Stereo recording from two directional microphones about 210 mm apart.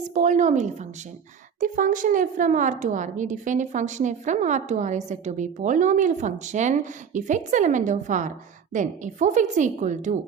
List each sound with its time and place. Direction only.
0.1 s a woman's voice: 35° right (ahead or behind)